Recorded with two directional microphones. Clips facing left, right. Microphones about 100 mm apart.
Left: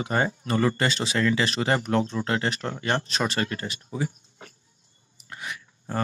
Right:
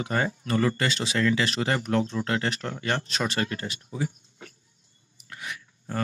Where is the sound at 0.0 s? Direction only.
25° left (ahead or behind).